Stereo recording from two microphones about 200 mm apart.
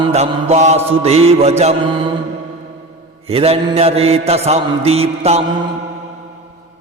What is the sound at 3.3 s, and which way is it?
A man's voice, 30° right (ahead or behind).